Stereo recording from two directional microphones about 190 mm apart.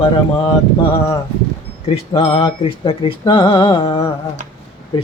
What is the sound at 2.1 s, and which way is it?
Speech, 30° left (ahead or behind).